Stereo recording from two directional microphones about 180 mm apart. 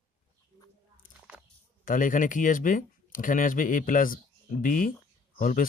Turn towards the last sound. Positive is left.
turn(degrees=50)  # may be behind; listen again after turning